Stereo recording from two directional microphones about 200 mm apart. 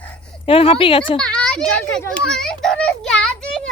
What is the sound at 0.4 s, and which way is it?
Speech, 30° left (ahead or behind).